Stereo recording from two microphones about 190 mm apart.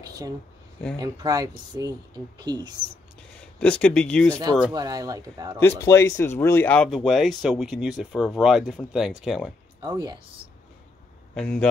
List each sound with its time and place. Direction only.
0.0 s speech: 20° right (ahead or behind)
3.3 s speech: 5° left (ahead or behind)
4.7 s speech: 20° right (ahead or behind)
5.8 s speech: 15° left (ahead or behind); by 9.5 s centre (ahead or behind)
9.8 s speech: 25° right (ahead or behind)
11.3 s speech: 5° left (ahead or behind)